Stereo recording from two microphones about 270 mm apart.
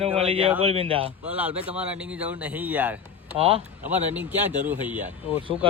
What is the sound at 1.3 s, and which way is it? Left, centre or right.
A man's voice, centre.